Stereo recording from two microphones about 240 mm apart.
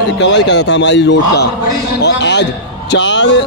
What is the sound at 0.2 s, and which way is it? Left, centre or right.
A man's voice, left.